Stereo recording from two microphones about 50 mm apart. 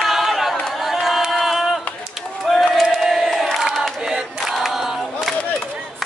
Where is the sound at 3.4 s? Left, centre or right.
Centre.